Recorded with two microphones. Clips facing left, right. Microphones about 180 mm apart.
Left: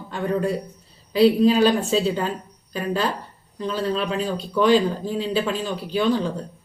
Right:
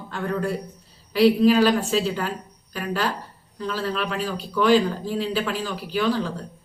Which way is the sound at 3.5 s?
20° left (ahead or behind).